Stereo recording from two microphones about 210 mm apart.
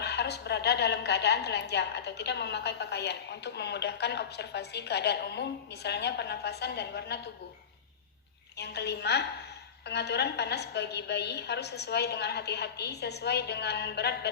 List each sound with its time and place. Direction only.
0.0 s a woman's voice: 50° left (ahead or behind)
8.5 s a woman's voice: 50° left (ahead or behind)